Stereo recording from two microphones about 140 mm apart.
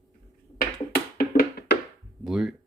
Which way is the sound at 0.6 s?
90° left.